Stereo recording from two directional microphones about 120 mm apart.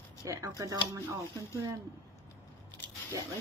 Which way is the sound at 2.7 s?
15° left (ahead or behind).